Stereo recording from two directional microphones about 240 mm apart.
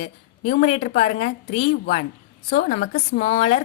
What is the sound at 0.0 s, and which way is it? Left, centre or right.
A woman's voice, left.